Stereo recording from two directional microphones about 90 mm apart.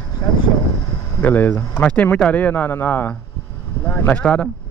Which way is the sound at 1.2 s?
20° left (ahead or behind).